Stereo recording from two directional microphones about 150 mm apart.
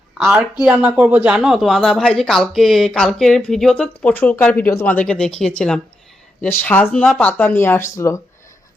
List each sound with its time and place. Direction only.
0.1 s speech: 10° right (ahead or behind); by 8.2 s 20° left (ahead or behind)